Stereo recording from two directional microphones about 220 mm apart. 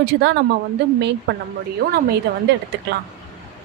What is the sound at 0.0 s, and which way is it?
Speech, 50° right (ahead or behind).